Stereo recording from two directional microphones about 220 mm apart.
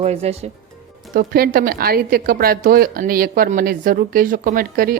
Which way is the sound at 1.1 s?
45° right (ahead or behind).